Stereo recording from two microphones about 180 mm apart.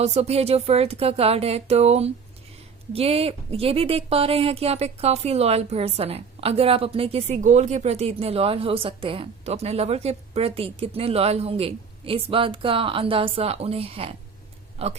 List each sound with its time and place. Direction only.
0.0 s speech: 35° right (ahead or behind)